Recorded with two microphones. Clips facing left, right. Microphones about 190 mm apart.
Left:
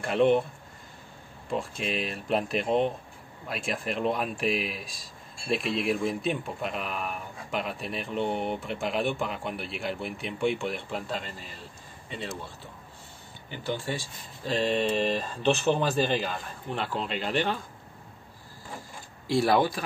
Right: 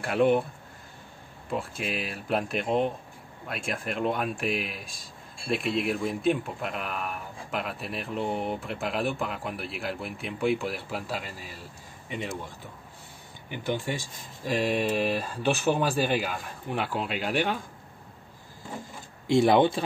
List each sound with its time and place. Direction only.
0.0 s speech: 5° right (ahead or behind)
1.5 s speech: 5° right (ahead or behind)
13.5 s speech: 15° right (ahead or behind)
19.2 s speech: 20° right (ahead or behind)